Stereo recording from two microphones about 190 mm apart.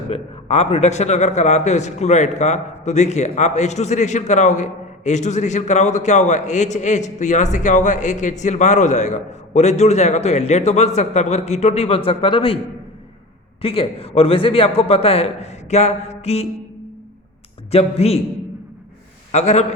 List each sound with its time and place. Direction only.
0.1 s a man's voice: 30° left (ahead or behind)
13.6 s a man's voice: 30° left (ahead or behind)
17.7 s a man's voice: 30° left (ahead or behind)
19.3 s a man's voice: 35° left (ahead or behind)